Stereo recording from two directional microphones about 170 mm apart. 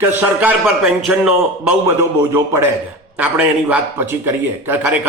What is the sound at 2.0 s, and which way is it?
A man's voice, 15° right (ahead or behind).